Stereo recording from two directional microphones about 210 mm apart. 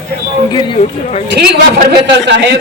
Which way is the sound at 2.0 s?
55° right (ahead or behind).